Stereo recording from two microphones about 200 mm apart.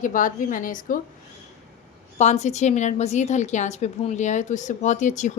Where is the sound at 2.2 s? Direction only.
35° left (ahead or behind).